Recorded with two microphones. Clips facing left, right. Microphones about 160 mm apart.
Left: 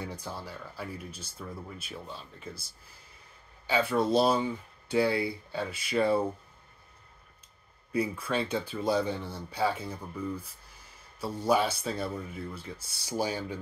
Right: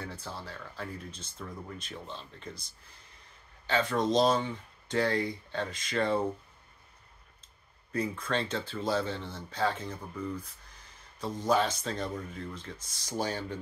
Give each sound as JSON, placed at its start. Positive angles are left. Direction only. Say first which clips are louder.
{"t": 0.0, "sound": "speech", "louder": "left 2 dB", "side_deg": 15}
{"t": 7.9, "sound": "speech", "louder": "left 2 dB", "side_deg": 10}